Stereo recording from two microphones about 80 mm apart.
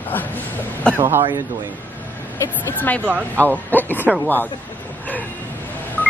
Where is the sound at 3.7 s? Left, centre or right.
Left.